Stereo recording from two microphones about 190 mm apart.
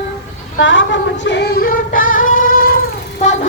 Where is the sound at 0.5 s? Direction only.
80° left; by 2.7 s 45° left (ahead or behind).